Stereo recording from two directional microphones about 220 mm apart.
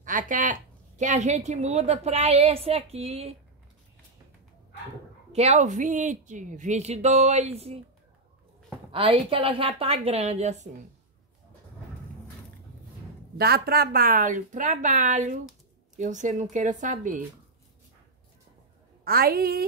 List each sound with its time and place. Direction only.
0.0 s a woman's voice: 35° right (ahead or behind)
5.3 s a woman's voice: 30° right (ahead or behind)
8.9 s a woman's voice: 25° right (ahead or behind)
13.4 s a woman's voice: 45° right (ahead or behind)
19.0 s a woman's voice: 45° right (ahead or behind)